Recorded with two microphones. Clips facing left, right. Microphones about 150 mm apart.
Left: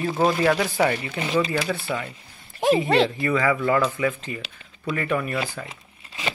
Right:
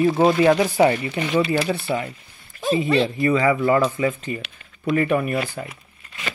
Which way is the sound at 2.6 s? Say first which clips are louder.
Left 1 dB; 80° left.